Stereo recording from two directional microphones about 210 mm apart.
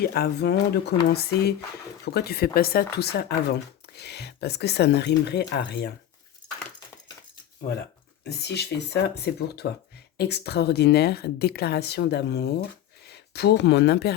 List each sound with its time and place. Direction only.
0.0 s a woman's voice: 45° left (ahead or behind)
8.2 s a woman's voice: 50° left (ahead or behind)